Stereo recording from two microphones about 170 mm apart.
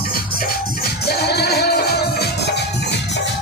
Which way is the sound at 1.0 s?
70° left (ahead or behind).